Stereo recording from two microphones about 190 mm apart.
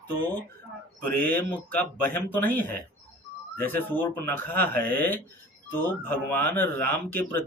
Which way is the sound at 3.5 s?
10° left (ahead or behind).